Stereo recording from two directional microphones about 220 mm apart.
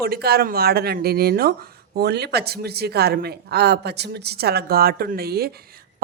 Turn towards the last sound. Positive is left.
turn(degrees=-45)  # may be behind; listen again after turning